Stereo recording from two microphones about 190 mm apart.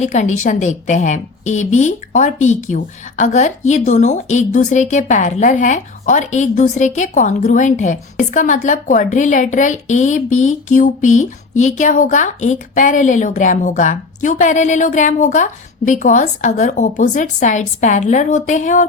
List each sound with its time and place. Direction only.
0.0 s a woman's voice: 40° left (ahead or behind)